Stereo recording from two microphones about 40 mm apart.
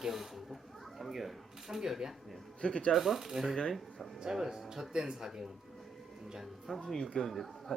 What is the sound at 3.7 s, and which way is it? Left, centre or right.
Speech, centre.